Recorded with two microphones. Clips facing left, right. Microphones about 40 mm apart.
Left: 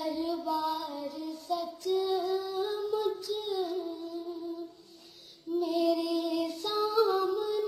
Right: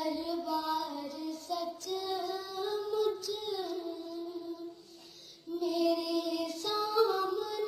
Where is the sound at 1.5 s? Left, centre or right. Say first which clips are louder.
Left 7 dB; centre.